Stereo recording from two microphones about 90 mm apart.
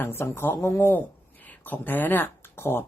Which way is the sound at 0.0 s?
25° left (ahead or behind).